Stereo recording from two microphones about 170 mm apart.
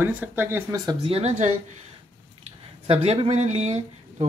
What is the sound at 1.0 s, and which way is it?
Speech, 35° right (ahead or behind).